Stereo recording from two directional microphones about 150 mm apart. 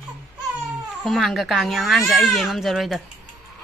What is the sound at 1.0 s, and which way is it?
Speech, centre (ahead or behind).